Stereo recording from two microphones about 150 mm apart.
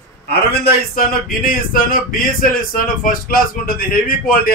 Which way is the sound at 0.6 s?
75° left (ahead or behind).